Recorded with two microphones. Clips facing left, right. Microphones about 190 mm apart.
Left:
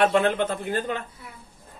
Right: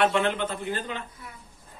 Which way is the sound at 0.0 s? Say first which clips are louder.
Left 3 dB; 45° left (ahead or behind).